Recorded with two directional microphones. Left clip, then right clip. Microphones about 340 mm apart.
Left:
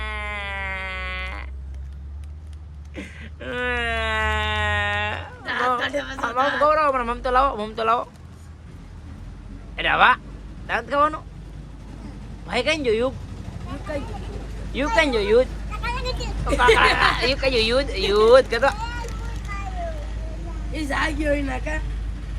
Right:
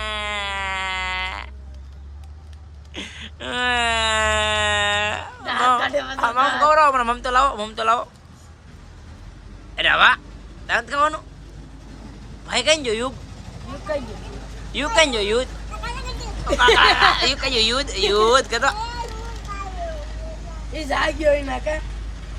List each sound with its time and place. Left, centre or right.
0.0 s music: centre
2.9 s a sound: centre
5.8 s speech: right
6.1 s speech: centre
9.7 s a man's voice: centre
12.5 s speech: centre
14.7 s speech: centre
20.7 s speech: centre